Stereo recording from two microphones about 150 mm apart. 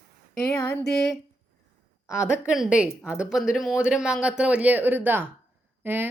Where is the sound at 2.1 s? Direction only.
5° right (ahead or behind).